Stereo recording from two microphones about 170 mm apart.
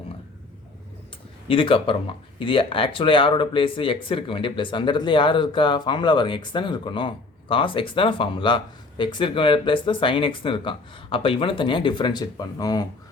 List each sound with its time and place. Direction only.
1.5 s speech: 30° left (ahead or behind)